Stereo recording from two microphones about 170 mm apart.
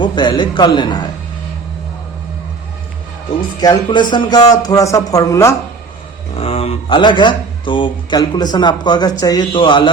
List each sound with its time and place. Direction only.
0.0 s speech: 25° left (ahead or behind)
3.6 s speech: 25° left (ahead or behind)
6.3 s speech: 35° left (ahead or behind)